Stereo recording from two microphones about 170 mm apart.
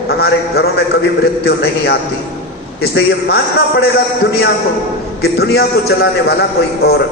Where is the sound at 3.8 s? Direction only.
70° left (ahead or behind).